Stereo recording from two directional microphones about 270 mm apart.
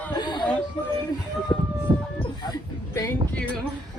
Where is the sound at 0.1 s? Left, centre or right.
Centre.